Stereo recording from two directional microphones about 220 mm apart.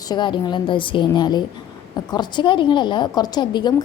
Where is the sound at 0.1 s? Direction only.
20° left (ahead or behind).